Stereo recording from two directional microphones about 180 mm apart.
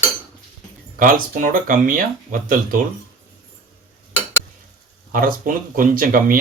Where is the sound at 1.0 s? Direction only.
50° right (ahead or behind).